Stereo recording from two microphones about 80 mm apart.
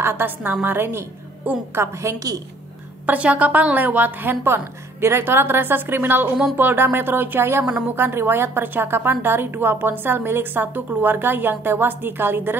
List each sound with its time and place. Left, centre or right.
0.0 s a woman's voice: right
1.8 s a woman's voice: right
3.1 s a woman's voice: centre